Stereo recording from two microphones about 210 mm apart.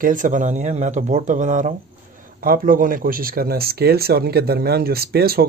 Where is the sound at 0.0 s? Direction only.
40° right (ahead or behind).